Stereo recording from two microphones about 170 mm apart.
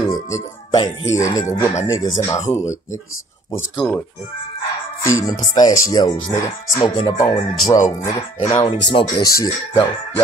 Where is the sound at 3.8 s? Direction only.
5° left (ahead or behind).